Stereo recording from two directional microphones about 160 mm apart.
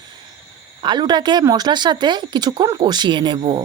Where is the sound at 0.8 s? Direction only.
25° right (ahead or behind).